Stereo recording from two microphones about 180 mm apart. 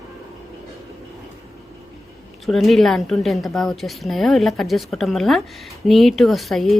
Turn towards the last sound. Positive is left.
turn(degrees=0)  # may be behind; listen again after turning